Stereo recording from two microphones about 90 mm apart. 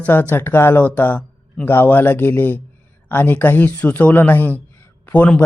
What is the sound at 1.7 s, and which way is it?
Speech, 20° left (ahead or behind).